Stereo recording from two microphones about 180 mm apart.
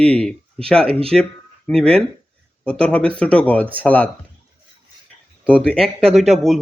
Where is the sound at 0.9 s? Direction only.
30° right (ahead or behind).